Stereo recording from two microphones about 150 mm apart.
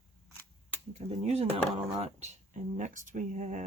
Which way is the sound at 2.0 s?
50° right (ahead or behind).